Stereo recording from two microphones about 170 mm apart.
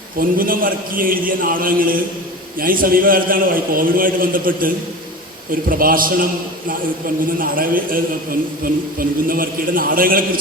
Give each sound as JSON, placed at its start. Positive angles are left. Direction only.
{"t": 0.2, "sound": "a man's voice", "side_deg": -55}
{"t": 7.3, "sound": "a man's voice", "side_deg": -55}